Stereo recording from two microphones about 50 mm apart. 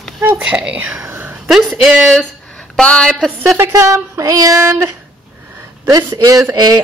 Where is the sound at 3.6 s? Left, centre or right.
Right.